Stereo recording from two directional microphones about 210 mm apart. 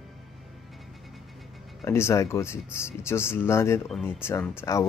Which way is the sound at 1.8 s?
15° left (ahead or behind).